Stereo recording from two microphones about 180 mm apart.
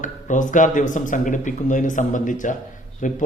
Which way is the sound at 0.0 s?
45° left (ahead or behind).